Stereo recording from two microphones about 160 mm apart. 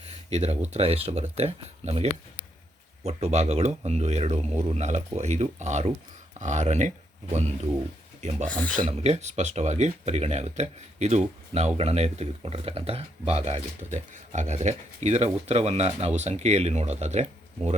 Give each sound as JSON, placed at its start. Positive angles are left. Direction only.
{"t": 0.3, "sound": "speech", "side_deg": -45}
{"t": 8.4, "sound": "speech", "side_deg": 10}
{"t": 8.9, "sound": "speech", "side_deg": -45}